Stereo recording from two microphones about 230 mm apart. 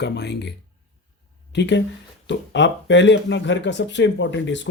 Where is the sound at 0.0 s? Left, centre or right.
Left.